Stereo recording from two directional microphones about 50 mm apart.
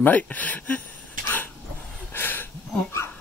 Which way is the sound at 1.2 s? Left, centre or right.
Left.